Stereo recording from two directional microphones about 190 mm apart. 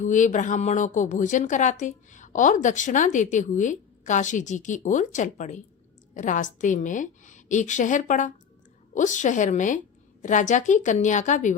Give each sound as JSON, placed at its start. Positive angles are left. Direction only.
{"t": 0.0, "sound": "a woman's voice", "side_deg": 40}